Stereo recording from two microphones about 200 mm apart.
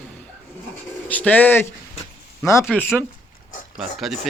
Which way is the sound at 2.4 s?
15° left (ahead or behind).